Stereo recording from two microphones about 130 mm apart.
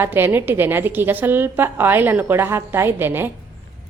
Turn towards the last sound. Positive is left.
turn(degrees=-15)  # may be behind; listen again after turning